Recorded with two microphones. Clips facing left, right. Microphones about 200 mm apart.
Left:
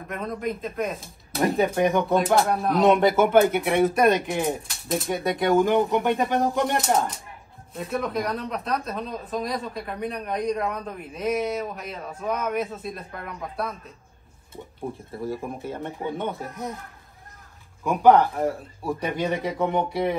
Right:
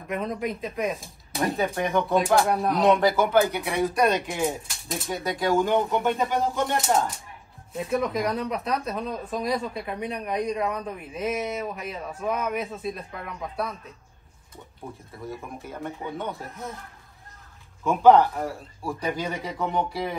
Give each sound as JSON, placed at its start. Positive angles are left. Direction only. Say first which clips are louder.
{"t": 0.1, "sound": "speech", "louder": "right 1 dB", "side_deg": 0}
{"t": 3.2, "sound": "speech", "louder": "left 3 dB", "side_deg": 25}
{"t": 4.6, "sound": "speech", "louder": "left 6 dB", "side_deg": 0}
{"t": 5.1, "sound": "speech", "louder": "left 2 dB", "side_deg": 20}
{"t": 6.6, "sound": "speech", "louder": "left 1 dB", "side_deg": 0}
{"t": 15.1, "sound": "speech", "louder": "left 5 dB", "side_deg": 30}
{"t": 16.3, "sound": "speech", "louder": "left 3 dB", "side_deg": 0}
{"t": 17.8, "sound": "speech", "louder": "even", "side_deg": 15}